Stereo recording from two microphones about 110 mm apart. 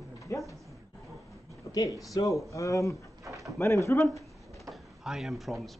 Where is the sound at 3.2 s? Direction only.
30° right (ahead or behind).